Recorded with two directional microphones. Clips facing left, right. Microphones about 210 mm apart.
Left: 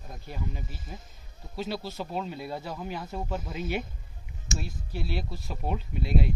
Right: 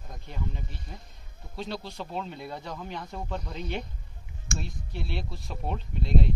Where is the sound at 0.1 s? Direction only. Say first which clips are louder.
Left 1 dB; 5° left (ahead or behind).